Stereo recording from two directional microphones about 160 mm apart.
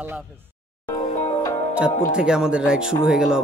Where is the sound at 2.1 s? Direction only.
5° right (ahead or behind).